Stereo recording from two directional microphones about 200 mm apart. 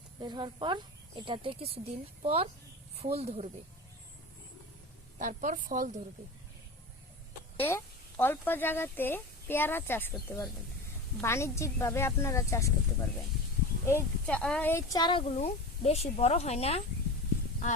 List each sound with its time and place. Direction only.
0.2 s a woman's voice: 20° right (ahead or behind)
5.2 s a woman's voice: 40° right (ahead or behind)
7.5 s speech: 10° left (ahead or behind)
13.8 s speech: 10° left (ahead or behind); by 16.8 s 30° left (ahead or behind)